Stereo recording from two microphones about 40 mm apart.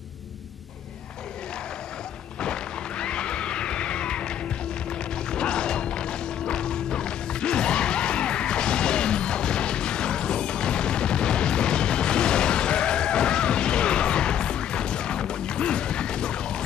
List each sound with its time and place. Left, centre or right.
2.4 s music: left